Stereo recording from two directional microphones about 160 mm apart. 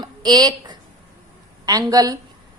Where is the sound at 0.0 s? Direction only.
25° right (ahead or behind).